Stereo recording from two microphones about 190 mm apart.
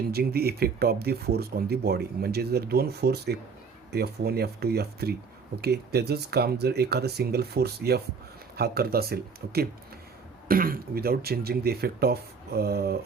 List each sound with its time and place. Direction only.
0.1 s speech: 55° right (ahead or behind)